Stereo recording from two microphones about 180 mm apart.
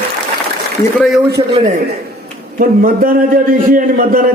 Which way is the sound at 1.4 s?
25° right (ahead or behind).